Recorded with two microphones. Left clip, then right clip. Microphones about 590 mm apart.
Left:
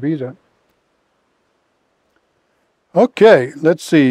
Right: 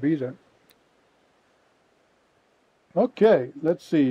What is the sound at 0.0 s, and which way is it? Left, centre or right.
Speech, left.